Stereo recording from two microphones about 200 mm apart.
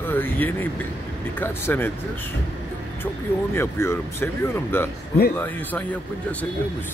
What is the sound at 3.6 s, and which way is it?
A man's voice, 15° left (ahead or behind).